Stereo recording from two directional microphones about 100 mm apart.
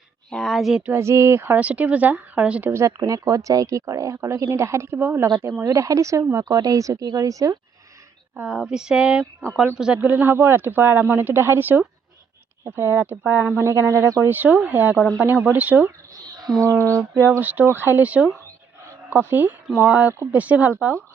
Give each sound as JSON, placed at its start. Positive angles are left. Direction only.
{"t": 0.3, "sound": "speech", "side_deg": 5}
{"t": 0.9, "sound": "a woman's voice", "side_deg": -30}
{"t": 2.7, "sound": "speech", "side_deg": -30}
{"t": 5.6, "sound": "speech", "side_deg": -35}
{"t": 8.4, "sound": "a woman's voice", "side_deg": -10}
{"t": 10.0, "sound": "a woman's voice", "side_deg": -20}
{"t": 16.6, "sound": "a woman's voice", "side_deg": -30}